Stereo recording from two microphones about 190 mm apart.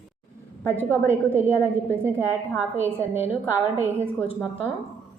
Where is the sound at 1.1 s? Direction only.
10° right (ahead or behind).